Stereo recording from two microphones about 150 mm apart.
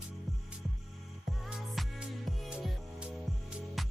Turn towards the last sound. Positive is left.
turn(degrees=-5)  # may be behind; listen again after turning